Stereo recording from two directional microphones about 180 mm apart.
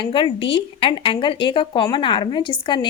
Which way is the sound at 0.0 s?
30° left (ahead or behind).